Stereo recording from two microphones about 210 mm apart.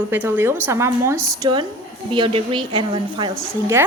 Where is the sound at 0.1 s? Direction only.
10° right (ahead or behind).